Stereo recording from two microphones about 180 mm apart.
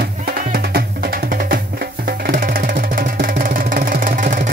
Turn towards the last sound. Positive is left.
turn(degrees=-50)  # may be behind; listen again after turning